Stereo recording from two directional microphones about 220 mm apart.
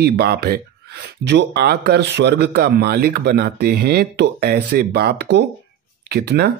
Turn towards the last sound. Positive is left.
turn(degrees=-50)  # may be behind; listen again after turning